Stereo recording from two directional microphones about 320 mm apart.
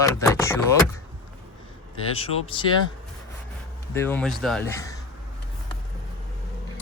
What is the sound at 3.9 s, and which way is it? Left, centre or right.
Speech, centre.